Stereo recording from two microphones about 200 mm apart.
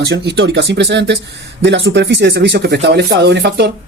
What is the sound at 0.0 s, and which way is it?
Speech, 55° right (ahead or behind).